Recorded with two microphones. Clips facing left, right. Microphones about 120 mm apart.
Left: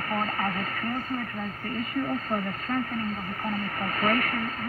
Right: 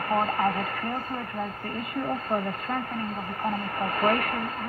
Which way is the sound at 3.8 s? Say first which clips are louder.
Right 2 dB; 30° right (ahead or behind).